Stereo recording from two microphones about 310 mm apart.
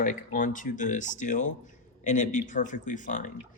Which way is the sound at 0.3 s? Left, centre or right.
Left.